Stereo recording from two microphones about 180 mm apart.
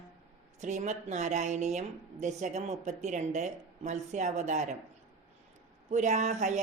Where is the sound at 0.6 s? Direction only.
40° right (ahead or behind).